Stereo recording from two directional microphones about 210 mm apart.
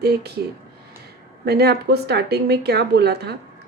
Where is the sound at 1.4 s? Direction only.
50° right (ahead or behind).